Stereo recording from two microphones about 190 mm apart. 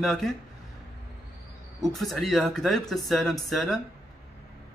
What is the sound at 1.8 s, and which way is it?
A man's voice, centre (ahead or behind).